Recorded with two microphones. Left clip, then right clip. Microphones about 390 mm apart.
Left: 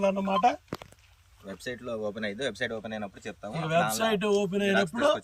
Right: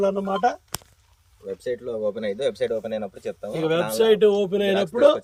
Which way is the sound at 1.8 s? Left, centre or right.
Centre.